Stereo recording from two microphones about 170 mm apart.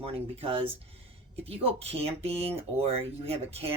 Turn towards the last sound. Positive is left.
turn(degrees=-35)  # may be behind; listen again after turning